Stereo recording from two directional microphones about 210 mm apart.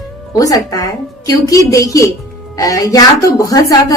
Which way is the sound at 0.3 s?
15° left (ahead or behind).